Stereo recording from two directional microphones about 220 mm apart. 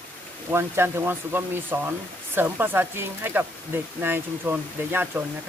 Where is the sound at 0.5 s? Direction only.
10° right (ahead or behind).